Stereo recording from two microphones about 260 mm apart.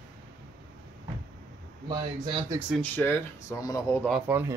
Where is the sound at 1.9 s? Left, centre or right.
Centre.